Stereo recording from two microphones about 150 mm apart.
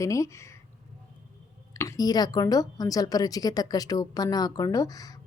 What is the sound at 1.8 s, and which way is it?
A woman's voice, 20° left (ahead or behind).